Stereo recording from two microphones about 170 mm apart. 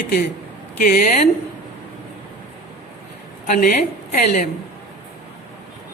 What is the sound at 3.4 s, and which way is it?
A woman's voice, 50° left (ahead or behind).